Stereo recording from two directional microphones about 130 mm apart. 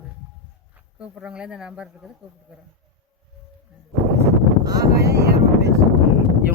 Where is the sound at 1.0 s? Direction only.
5° right (ahead or behind).